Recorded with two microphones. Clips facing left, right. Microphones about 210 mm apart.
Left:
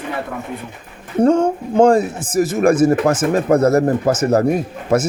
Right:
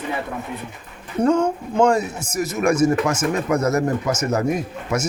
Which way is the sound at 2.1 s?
55° left (ahead or behind).